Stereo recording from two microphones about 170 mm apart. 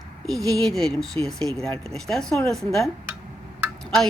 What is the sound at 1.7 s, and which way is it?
Speech, 35° right (ahead or behind).